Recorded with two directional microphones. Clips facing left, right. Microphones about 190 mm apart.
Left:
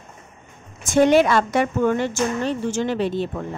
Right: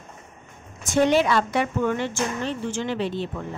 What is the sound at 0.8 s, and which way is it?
Speech, 50° left (ahead or behind).